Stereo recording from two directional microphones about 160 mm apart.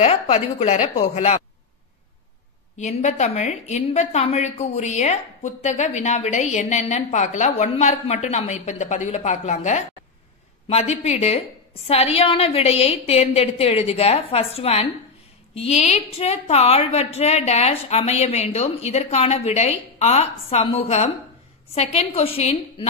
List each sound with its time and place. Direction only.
0.0 s a woman's voice: 40° left (ahead or behind)
2.8 s a woman's voice: 45° left (ahead or behind)